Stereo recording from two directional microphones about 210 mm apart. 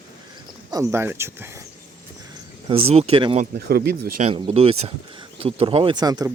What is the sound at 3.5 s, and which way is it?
Speech, 50° right (ahead or behind).